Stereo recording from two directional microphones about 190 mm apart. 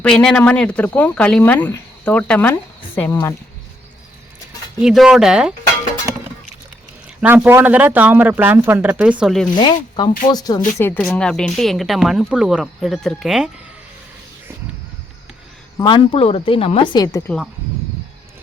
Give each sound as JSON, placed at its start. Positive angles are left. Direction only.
{"t": 0.0, "sound": "speech", "side_deg": 5}
{"t": 4.8, "sound": "speech", "side_deg": -5}
{"t": 7.2, "sound": "speech", "side_deg": -10}
{"t": 9.6, "sound": "a woman's voice", "side_deg": 25}
{"t": 15.8, "sound": "a woman's voice", "side_deg": 25}
{"t": 17.2, "sound": "speech", "side_deg": 5}